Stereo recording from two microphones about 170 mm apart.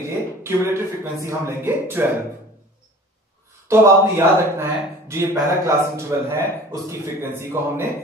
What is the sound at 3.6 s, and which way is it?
A man's voice, 15° right (ahead or behind).